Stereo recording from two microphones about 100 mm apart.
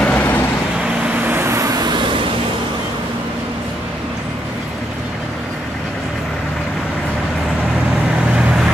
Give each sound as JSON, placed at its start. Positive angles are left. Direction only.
{"t": 0.0, "sound": "vehicle", "side_deg": 15}
{"t": 1.2, "sound": "vehicle", "side_deg": -25}